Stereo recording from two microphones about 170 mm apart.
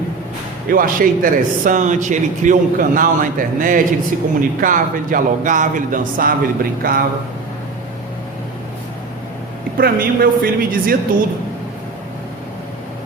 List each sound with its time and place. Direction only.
0.7 s speech: 55° right (ahead or behind)
9.7 s a woman's voice: 60° right (ahead or behind)